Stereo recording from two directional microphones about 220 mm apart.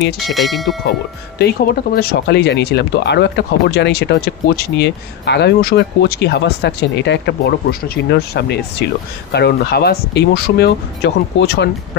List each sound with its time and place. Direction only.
0.2 s speech: centre (ahead or behind)
1.4 s speech: 45° left (ahead or behind)